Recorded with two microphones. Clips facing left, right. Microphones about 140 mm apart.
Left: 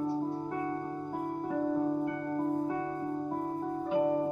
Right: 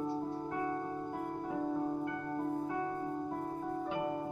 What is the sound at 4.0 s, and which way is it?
Music, 30° left (ahead or behind).